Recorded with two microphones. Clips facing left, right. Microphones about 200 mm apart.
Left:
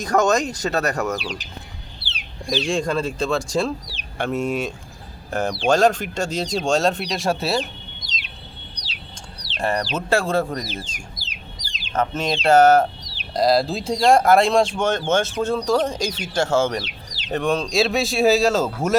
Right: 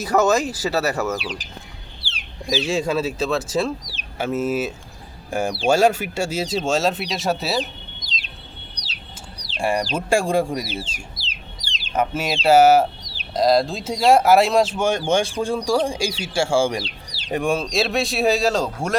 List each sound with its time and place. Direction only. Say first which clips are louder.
0.0 s speech: right 1 dB; 5° right (ahead or behind)
2.5 s speech: right 1 dB; 5° right (ahead or behind)
9.6 s speech: right 1 dB; 10° right (ahead or behind)
11.2 s chicken: even; 30° right (ahead or behind)
11.9 s speech: even; 10° right (ahead or behind)